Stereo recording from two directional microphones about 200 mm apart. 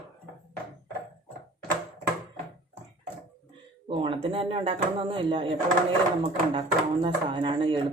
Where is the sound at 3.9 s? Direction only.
25° right (ahead or behind).